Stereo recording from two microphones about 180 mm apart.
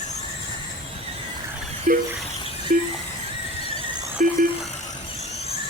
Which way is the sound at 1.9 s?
45° right (ahead or behind).